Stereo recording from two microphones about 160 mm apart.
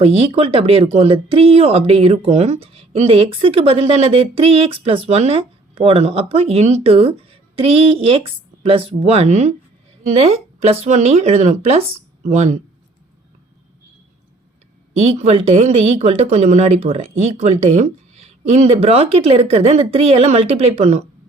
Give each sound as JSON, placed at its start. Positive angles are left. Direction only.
{"t": 0.0, "sound": "speech", "side_deg": -40}
{"t": 14.9, "sound": "speech", "side_deg": -40}